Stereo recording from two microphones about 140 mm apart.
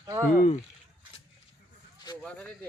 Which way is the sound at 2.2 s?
5° left (ahead or behind).